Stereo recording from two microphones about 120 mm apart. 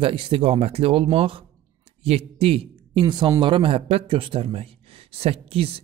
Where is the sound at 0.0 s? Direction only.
45° right (ahead or behind).